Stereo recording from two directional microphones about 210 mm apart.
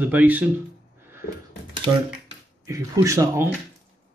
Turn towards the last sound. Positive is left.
turn(degrees=-15)  # may be behind; listen again after turning